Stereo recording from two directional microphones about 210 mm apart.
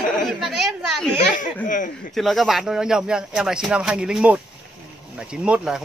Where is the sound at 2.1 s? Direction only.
Centre (ahead or behind).